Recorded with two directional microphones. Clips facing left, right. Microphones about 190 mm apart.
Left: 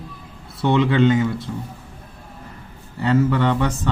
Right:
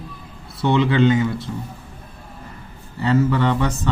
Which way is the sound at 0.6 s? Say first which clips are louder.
Even; 50° left (ahead or behind).